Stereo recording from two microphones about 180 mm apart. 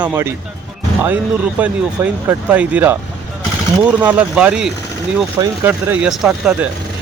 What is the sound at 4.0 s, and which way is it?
Speech, 10° right (ahead or behind).